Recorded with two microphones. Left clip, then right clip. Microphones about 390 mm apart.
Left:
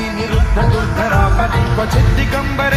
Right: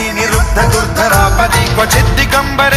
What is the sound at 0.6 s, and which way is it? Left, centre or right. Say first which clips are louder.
Music: right 5 dB; right.